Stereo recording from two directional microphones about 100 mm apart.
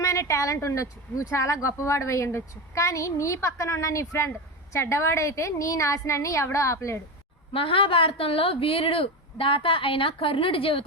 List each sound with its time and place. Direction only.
0.0 s a woman's voice: 30° left (ahead or behind)
7.5 s a woman's voice: 65° left (ahead or behind)